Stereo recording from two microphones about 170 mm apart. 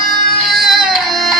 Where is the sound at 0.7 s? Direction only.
Centre (ahead or behind).